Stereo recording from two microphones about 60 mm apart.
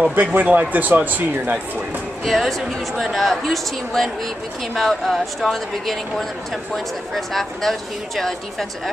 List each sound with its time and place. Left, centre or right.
0.1 s speech: right
2.2 s speech: centre